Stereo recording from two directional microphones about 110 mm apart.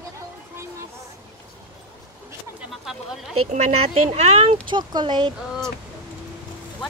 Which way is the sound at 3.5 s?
75° right (ahead or behind).